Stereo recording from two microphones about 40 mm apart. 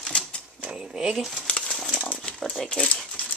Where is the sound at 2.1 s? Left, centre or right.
Left.